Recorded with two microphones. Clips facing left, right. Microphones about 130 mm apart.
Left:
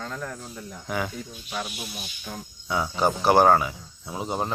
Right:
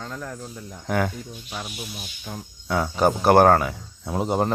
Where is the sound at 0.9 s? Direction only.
55° right (ahead or behind).